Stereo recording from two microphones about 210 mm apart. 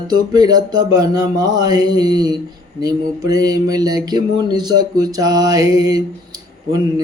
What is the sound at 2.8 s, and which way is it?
Mantra, 20° right (ahead or behind).